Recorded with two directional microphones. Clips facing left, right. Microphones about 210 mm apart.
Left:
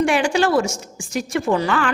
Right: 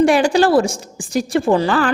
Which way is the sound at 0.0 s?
35° right (ahead or behind).